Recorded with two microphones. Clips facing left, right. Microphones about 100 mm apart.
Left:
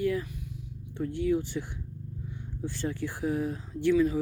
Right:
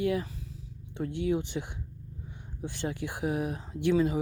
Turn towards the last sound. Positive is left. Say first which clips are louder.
# left 2 dB
turn(degrees=-20)  # may be behind; listen again after turning